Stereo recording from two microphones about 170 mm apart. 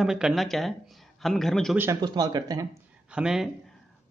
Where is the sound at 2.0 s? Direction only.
25° right (ahead or behind).